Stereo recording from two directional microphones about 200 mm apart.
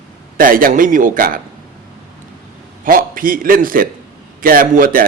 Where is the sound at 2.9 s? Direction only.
45° right (ahead or behind).